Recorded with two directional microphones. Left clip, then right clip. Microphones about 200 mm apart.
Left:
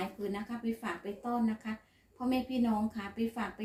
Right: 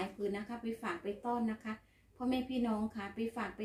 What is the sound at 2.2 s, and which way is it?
Speech, centre (ahead or behind).